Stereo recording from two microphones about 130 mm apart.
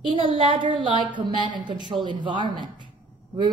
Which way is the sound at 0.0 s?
40° right (ahead or behind).